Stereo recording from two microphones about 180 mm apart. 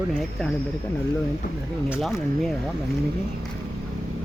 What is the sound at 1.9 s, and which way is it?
Speech, centre (ahead or behind).